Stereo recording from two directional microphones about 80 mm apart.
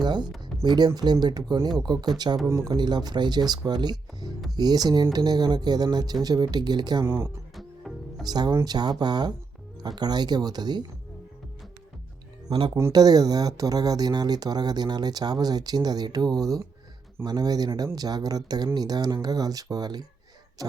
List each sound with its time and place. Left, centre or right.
0.0 s music: right
0.6 s speech: right
2.5 s speech: right
2.7 s speech: right
7.0 s speech: right
7.9 s music: centre
8.2 s speech: right
12.5 s speech: right
12.9 s speech: right